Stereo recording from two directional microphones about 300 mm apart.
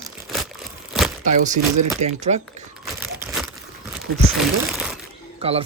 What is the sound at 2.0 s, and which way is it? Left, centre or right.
Speech, right.